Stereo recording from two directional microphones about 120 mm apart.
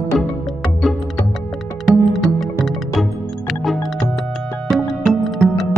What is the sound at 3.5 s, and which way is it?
Music, centre (ahead or behind).